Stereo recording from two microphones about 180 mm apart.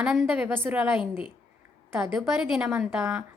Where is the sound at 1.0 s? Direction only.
25° left (ahead or behind).